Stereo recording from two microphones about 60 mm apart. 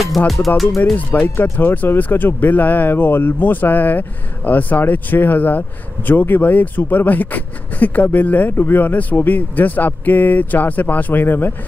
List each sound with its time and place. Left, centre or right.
0.5 s speech: left